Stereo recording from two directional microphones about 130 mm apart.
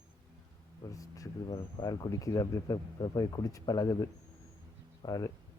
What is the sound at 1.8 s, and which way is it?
Speech, 25° left (ahead or behind).